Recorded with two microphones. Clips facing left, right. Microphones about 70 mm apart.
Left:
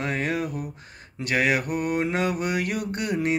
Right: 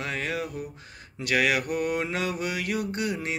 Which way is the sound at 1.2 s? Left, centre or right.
Left.